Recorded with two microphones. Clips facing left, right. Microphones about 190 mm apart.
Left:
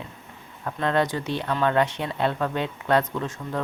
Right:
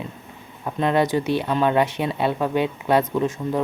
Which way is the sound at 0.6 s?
15° right (ahead or behind).